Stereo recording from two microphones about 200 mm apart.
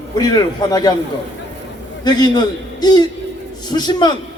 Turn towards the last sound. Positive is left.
turn(degrees=20)  # may be behind; listen again after turning